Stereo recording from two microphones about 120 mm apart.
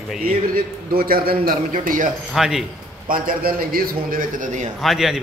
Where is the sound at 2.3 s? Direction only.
5° right (ahead or behind).